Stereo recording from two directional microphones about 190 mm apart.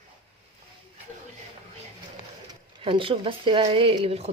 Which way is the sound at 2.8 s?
25° right (ahead or behind).